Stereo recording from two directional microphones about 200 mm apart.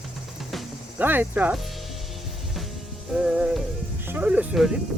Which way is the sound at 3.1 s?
5° right (ahead or behind).